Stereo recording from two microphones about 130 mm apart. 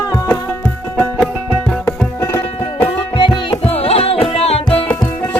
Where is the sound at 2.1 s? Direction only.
25° left (ahead or behind).